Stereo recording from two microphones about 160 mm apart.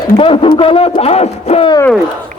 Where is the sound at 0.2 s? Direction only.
35° left (ahead or behind).